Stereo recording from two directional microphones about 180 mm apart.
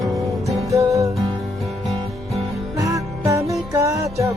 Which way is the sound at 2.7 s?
20° right (ahead or behind).